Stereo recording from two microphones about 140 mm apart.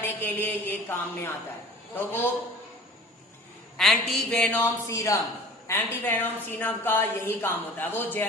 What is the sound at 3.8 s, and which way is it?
Speech, centre (ahead or behind).